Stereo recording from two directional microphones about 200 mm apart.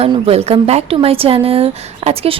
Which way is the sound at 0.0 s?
30° right (ahead or behind).